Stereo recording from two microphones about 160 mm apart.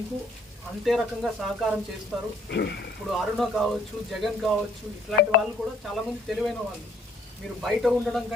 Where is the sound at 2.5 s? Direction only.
90° left.